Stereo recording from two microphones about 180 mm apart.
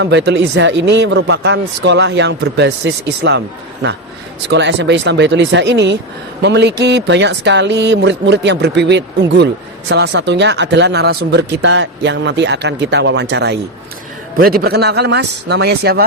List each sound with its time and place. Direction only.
0.0 s speech: 75° right (ahead or behind)
4.4 s speech: 75° right (ahead or behind)
14.3 s a man's voice: 55° right (ahead or behind)